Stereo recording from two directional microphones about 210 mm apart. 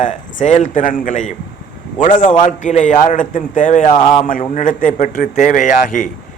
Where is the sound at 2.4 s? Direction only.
35° left (ahead or behind).